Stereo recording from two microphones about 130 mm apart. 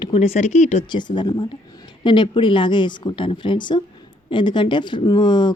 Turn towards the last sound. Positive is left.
turn(degrees=35)  # may be behind; listen again after turning